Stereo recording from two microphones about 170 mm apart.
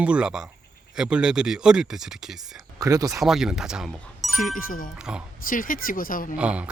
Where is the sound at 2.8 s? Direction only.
20° right (ahead or behind).